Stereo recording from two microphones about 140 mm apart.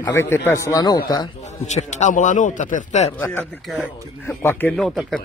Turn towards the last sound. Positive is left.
turn(degrees=0)  # may be behind; listen again after turning